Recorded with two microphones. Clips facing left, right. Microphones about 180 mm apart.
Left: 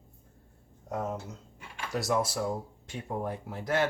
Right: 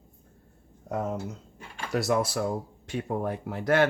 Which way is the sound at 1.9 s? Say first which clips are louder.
Right 3 dB; 65° right (ahead or behind).